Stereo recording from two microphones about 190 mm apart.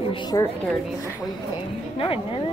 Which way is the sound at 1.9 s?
30° left (ahead or behind).